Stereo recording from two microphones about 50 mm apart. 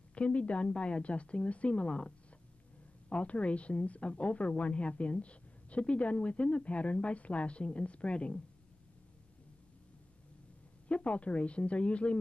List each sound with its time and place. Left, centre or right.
0.1 s a woman's voice: left
10.9 s a woman's voice: left